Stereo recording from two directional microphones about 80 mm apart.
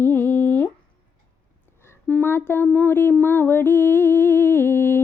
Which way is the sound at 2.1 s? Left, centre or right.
Left.